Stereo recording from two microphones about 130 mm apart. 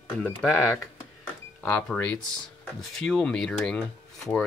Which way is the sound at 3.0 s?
5° left (ahead or behind).